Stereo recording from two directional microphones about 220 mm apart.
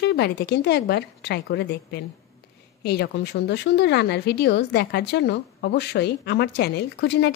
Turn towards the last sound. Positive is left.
turn(degrees=50)  # may be behind; listen again after turning